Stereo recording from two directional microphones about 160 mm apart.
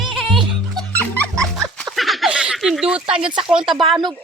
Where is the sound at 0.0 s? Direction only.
Centre (ahead or behind).